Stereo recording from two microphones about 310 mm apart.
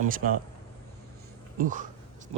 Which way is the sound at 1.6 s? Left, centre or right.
Right.